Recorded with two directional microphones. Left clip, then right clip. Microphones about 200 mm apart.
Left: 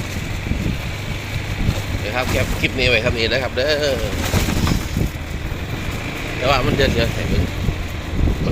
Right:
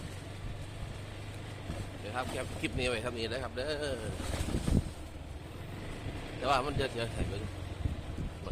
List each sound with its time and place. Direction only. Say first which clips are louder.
2.1 s speech: left 16 dB; 20° right (ahead or behind)
6.4 s speech: left 14 dB; 20° right (ahead or behind)